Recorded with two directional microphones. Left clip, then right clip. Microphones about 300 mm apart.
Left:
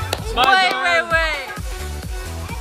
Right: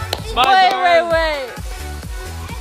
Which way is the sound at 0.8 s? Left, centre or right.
Centre.